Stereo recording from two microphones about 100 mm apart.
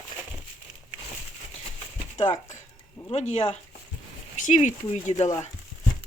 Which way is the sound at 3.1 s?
85° left.